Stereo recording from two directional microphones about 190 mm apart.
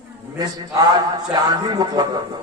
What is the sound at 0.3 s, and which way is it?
A man's voice, 20° right (ahead or behind).